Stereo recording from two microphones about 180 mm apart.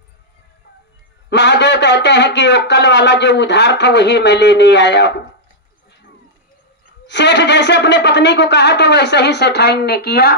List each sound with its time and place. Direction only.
1.3 s speech: 75° left (ahead or behind)
7.1 s speech: 75° left (ahead or behind); by 10.3 s 60° left (ahead or behind)